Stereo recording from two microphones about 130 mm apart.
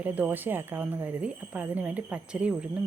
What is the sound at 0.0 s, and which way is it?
Speech, 15° right (ahead or behind).